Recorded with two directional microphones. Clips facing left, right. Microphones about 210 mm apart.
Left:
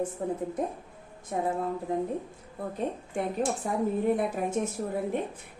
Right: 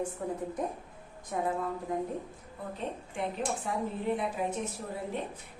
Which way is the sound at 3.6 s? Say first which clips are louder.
Left 7 dB; 45° left (ahead or behind).